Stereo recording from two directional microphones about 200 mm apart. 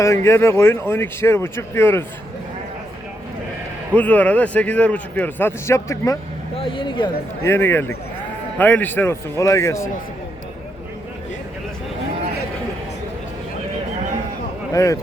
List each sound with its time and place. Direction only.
0.0 s a man's voice: 15° left (ahead or behind)
3.9 s a man's voice: 10° left (ahead or behind)
6.6 s a man's voice: 25° left (ahead or behind)
14.7 s speech: 15° left (ahead or behind)